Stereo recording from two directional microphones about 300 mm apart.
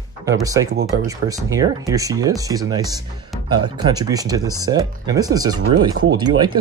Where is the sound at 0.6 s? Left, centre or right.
Right.